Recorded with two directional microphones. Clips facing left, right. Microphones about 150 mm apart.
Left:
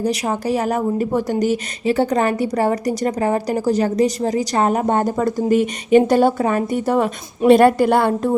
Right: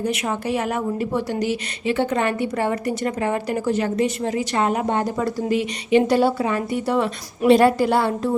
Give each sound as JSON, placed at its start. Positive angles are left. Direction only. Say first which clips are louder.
{"t": 0.0, "sound": "speech", "louder": "left 3 dB", "side_deg": 35}